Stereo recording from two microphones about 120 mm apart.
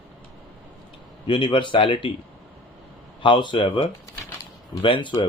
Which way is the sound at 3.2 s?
40° left (ahead or behind).